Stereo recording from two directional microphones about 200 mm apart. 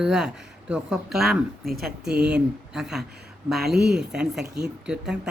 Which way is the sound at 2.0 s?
55° right (ahead or behind).